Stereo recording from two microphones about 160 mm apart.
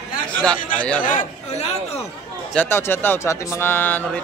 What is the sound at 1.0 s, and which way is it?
Speech, 55° left (ahead or behind).